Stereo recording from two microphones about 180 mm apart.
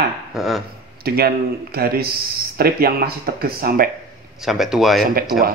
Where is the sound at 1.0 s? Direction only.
60° right (ahead or behind).